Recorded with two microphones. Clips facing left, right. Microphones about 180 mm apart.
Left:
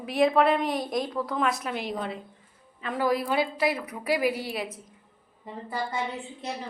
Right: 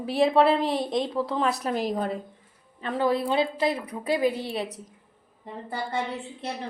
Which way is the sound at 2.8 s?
30° right (ahead or behind).